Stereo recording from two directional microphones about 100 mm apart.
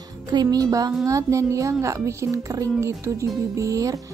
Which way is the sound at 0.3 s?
40° right (ahead or behind).